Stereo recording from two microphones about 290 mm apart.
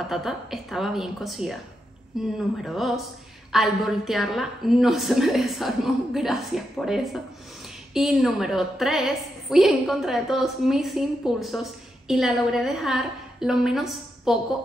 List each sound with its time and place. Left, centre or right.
0.0 s a woman's voice: centre